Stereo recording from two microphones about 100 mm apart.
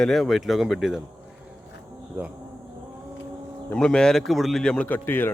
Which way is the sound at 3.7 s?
10° left (ahead or behind).